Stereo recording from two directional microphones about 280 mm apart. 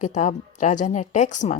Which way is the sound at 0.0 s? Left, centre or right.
Left.